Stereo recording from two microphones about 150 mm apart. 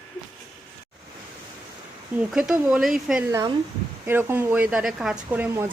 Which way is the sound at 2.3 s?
5° right (ahead or behind).